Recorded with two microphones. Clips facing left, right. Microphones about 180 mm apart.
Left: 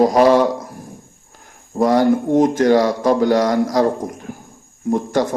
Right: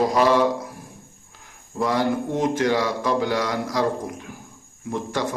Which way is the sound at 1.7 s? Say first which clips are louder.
Left 8 dB; 45° left (ahead or behind).